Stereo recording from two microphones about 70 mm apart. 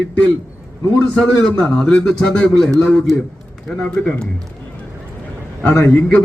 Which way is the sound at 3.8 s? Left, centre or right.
Centre.